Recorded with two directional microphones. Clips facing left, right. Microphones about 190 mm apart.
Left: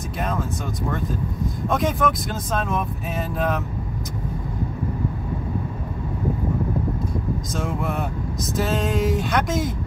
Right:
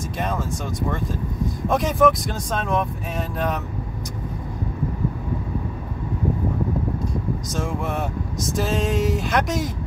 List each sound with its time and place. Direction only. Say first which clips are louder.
1.7 s speech: right 4 dB; centre (ahead or behind)
7.5 s speech: even; centre (ahead or behind)